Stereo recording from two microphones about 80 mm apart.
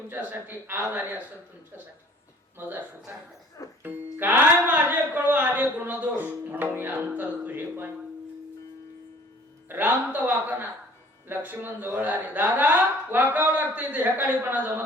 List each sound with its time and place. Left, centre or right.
0.1 s speech: right
2.6 s speech: right
3.8 s speech: right
9.6 s speech: right